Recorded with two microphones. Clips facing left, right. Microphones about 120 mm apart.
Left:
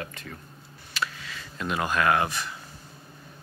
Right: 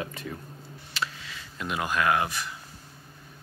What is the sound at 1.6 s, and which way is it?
Speech, 10° right (ahead or behind).